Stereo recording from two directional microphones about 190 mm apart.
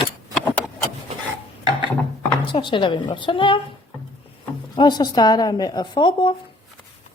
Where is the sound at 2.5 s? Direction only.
25° left (ahead or behind).